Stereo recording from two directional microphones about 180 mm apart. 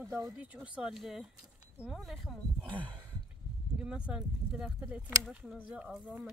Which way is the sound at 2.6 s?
25° right (ahead or behind).